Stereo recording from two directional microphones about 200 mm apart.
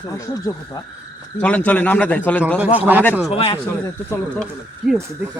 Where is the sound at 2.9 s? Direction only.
10° right (ahead or behind).